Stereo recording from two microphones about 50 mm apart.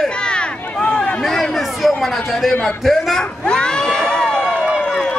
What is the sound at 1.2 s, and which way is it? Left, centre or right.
Chatter, centre.